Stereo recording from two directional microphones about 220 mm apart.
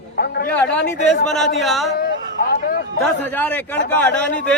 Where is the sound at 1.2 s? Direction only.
Centre (ahead or behind).